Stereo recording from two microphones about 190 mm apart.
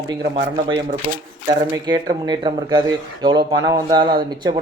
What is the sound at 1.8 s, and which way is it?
Speech, 20° right (ahead or behind).